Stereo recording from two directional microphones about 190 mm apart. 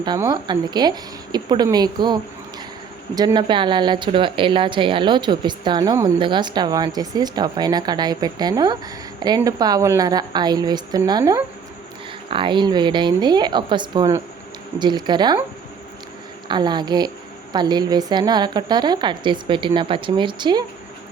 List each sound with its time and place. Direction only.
0.0 s a woman's voice: 20° right (ahead or behind)
3.2 s a woman's voice: 20° right (ahead or behind)
16.5 s a woman's voice: 25° right (ahead or behind)